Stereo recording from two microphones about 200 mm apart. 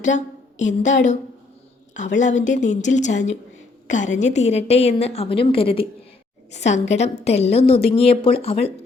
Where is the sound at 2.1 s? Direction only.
35° left (ahead or behind).